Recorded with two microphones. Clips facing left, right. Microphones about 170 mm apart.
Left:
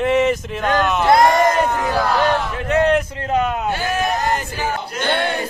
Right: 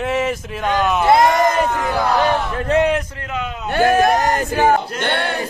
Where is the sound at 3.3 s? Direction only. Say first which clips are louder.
Left 8 dB; 50° left (ahead or behind).